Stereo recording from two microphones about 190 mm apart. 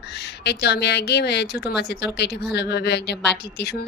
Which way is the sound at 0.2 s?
60° left (ahead or behind).